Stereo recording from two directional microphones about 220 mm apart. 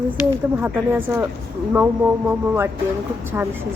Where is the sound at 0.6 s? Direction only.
10° right (ahead or behind).